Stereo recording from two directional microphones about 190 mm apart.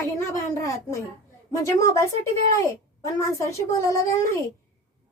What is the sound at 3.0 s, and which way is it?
A woman's voice, 15° left (ahead or behind).